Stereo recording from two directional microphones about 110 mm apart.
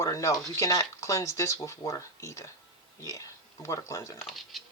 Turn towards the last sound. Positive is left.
turn(degrees=0)  # may be behind; listen again after turning